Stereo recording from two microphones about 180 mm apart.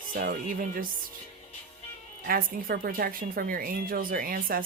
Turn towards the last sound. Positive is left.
turn(degrees=-55)  # may be behind; listen again after turning